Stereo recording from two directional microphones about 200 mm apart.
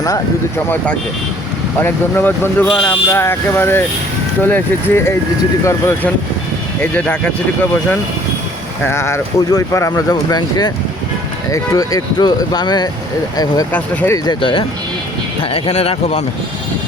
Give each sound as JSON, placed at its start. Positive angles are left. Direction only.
{"t": 1.8, "sound": "speech", "side_deg": 10}
{"t": 8.9, "sound": "speech", "side_deg": 15}
{"t": 13.7, "sound": "speech", "side_deg": 10}
{"t": 14.3, "sound": "speech", "side_deg": 25}